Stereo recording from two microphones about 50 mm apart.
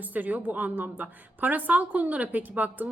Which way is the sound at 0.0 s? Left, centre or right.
Right.